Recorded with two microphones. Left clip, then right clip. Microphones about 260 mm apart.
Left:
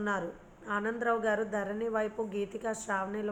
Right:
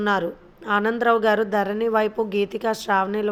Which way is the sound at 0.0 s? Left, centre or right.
Right.